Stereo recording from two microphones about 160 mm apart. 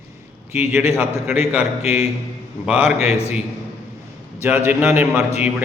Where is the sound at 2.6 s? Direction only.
10° right (ahead or behind).